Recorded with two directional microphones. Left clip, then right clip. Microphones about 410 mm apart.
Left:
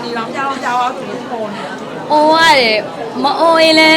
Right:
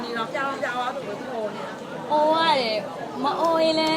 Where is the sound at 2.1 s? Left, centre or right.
Centre.